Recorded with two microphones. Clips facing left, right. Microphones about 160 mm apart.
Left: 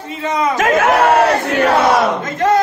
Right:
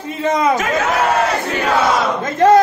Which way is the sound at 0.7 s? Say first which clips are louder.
Left 5 dB; 50° left (ahead or behind).